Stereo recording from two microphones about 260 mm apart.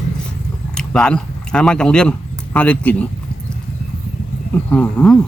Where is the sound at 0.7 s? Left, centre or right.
Centre.